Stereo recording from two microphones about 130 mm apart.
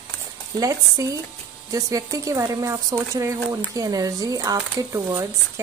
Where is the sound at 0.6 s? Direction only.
25° right (ahead or behind).